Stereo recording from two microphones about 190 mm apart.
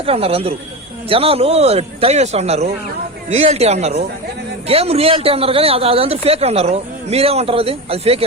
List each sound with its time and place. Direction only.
0.0 s speech: 30° right (ahead or behind)